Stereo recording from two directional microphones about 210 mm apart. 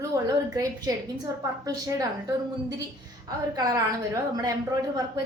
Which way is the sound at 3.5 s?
15° right (ahead or behind).